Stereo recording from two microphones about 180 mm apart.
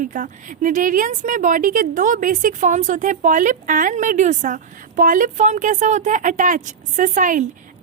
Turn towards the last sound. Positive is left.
turn(degrees=-45)  # may be behind; listen again after turning